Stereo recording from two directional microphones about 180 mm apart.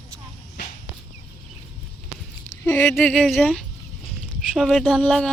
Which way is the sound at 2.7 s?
15° left (ahead or behind).